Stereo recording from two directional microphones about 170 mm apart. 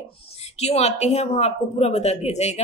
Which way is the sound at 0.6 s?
40° left (ahead or behind).